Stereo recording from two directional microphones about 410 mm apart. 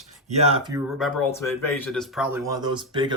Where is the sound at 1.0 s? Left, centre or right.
Centre.